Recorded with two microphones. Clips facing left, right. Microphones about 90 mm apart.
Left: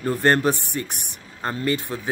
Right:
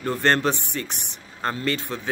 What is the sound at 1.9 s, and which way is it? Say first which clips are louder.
Speech: left 1 dB; 15° left (ahead or behind).